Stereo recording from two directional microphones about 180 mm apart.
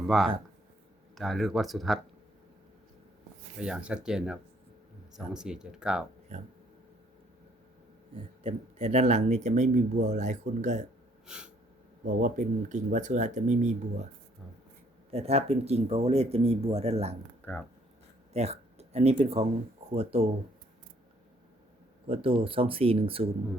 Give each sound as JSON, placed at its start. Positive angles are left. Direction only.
{"t": 0.1, "sound": "speech", "side_deg": 0}
{"t": 3.6, "sound": "speech", "side_deg": -5}
{"t": 8.4, "sound": "speech", "side_deg": -35}
{"t": 11.3, "sound": "snort", "side_deg": -5}
{"t": 12.0, "sound": "speech", "side_deg": -45}
{"t": 15.1, "sound": "speech", "side_deg": -35}
{"t": 17.5, "sound": "speech", "side_deg": 10}
{"t": 18.3, "sound": "speech", "side_deg": -35}
{"t": 22.0, "sound": "speech", "side_deg": -30}